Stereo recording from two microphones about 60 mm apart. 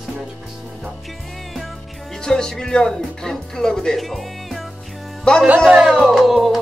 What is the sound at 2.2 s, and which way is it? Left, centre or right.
Speech, centre.